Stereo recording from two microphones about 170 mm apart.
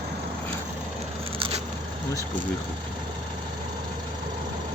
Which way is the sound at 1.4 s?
35° right (ahead or behind).